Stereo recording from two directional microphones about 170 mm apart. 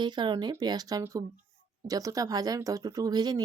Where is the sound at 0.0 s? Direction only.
25° right (ahead or behind).